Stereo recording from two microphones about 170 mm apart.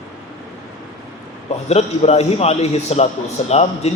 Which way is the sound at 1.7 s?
40° left (ahead or behind).